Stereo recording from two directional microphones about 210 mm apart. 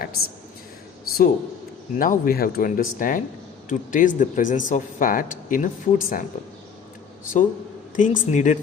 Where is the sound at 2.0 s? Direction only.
40° left (ahead or behind).